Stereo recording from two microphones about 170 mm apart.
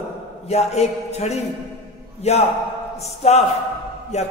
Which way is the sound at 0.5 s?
40° left (ahead or behind).